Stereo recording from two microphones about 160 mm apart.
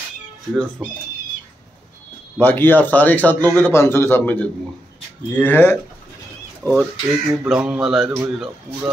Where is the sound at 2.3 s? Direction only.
10° left (ahead or behind).